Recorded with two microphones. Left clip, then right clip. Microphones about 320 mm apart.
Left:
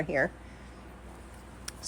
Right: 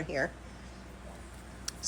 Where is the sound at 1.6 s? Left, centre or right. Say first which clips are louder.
Right 3 dB; left.